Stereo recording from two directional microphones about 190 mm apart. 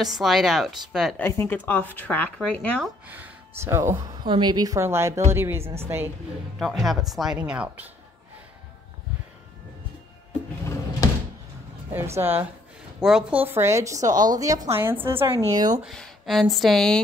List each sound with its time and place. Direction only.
0.0 s speech: centre (ahead or behind)
1.1 s speech: 15° left (ahead or behind)
3.1 s a woman's voice: 10° right (ahead or behind)
6.6 s speech: centre (ahead or behind)
11.0 s door: 20° left (ahead or behind)
11.9 s a woman's voice: 10° right (ahead or behind)
15.8 s speech: centre (ahead or behind)